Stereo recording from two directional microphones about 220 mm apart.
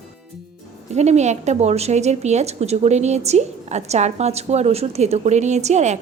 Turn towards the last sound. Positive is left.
turn(degrees=-30)  # may be behind; listen again after turning